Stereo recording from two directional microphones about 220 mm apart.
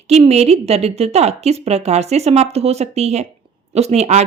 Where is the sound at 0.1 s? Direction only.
30° right (ahead or behind).